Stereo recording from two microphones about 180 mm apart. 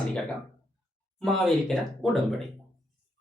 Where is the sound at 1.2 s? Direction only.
Centre (ahead or behind).